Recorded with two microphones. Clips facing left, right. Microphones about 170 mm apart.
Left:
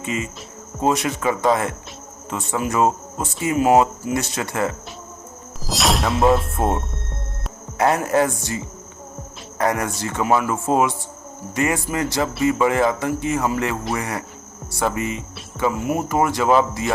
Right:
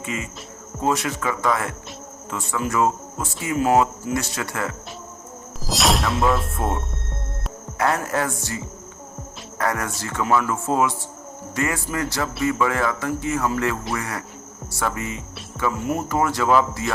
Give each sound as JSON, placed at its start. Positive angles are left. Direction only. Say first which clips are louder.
{"t": 0.0, "sound": "insect", "louder": "left 4 dB", "side_deg": 25}
{"t": 0.8, "sound": "speech", "louder": "left 3 dB", "side_deg": 20}
{"t": 5.5, "sound": "music", "louder": "even", "side_deg": 0}
{"t": 7.8, "sound": "speech", "louder": "left 5 dB", "side_deg": 20}
{"t": 9.6, "sound": "speech", "louder": "left 4 dB", "side_deg": 20}